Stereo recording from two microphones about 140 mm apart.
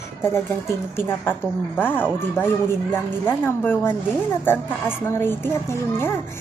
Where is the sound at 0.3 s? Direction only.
15° left (ahead or behind).